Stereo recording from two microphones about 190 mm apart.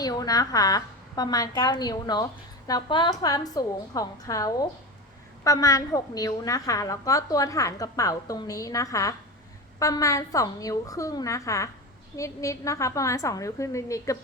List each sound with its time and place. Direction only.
0.0 s a woman's voice: 20° left (ahead or behind)